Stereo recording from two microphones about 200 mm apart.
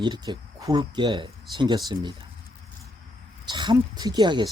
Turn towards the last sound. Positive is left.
turn(degrees=-20)  # may be behind; listen again after turning